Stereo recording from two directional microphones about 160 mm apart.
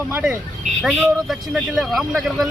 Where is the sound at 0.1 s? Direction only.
10° right (ahead or behind).